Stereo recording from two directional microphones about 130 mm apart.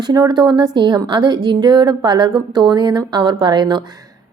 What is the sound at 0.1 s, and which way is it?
A woman's voice, 30° right (ahead or behind).